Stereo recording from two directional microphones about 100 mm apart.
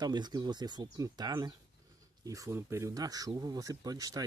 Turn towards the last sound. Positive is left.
turn(degrees=-35)  # may be behind; listen again after turning